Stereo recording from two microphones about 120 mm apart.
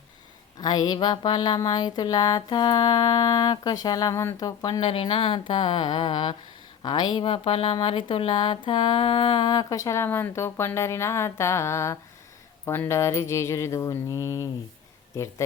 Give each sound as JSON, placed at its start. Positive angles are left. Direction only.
{"t": 0.6, "sound": "speech", "side_deg": 35}
{"t": 4.8, "sound": "a woman's voice", "side_deg": 50}
{"t": 12.6, "sound": "mantra", "side_deg": 20}